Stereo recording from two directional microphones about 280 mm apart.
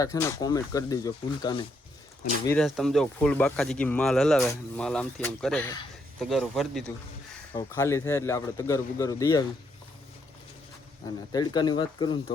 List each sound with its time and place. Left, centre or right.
0.0 s speech: centre
2.5 s speech: centre
11.3 s speech: centre